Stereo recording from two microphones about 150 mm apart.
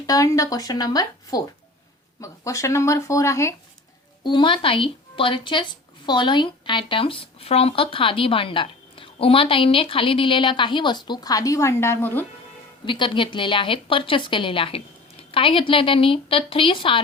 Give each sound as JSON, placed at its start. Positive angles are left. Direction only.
{"t": 0.1, "sound": "speech", "side_deg": 25}
{"t": 4.2, "sound": "speech", "side_deg": 30}
{"t": 12.8, "sound": "speech", "side_deg": 35}